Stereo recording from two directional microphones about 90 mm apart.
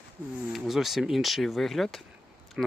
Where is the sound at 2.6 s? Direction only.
10° right (ahead or behind).